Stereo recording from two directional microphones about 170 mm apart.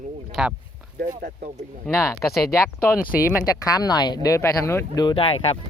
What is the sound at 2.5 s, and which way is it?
Speech, 15° left (ahead or behind).